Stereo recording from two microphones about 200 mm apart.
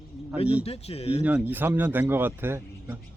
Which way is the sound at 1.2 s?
10° right (ahead or behind).